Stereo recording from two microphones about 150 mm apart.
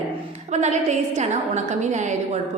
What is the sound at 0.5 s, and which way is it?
A woman's voice, 50° right (ahead or behind).